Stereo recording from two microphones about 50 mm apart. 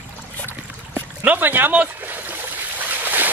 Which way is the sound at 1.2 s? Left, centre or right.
Right.